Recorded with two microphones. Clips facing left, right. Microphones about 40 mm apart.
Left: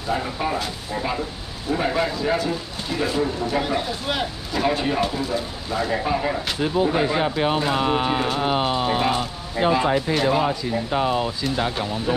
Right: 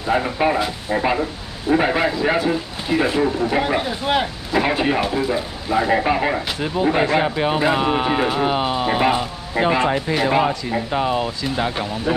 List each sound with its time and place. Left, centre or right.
0.1 s speech: right
3.3 s speech: centre
5.9 s speech: right
6.6 s speech: centre
8.5 s speech: centre